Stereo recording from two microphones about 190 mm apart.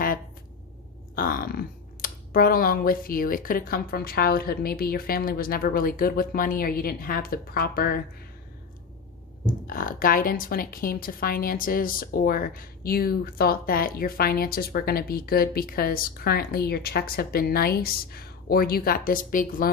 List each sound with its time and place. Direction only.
1.1 s a woman's voice: 50° left (ahead or behind)
9.6 s a woman's voice: 50° left (ahead or behind)